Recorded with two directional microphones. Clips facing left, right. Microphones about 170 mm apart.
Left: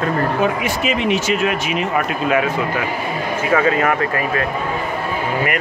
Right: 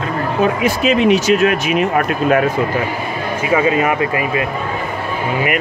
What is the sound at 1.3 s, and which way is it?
A man's voice, 55° right (ahead or behind).